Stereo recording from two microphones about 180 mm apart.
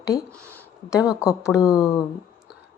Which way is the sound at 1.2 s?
15° left (ahead or behind).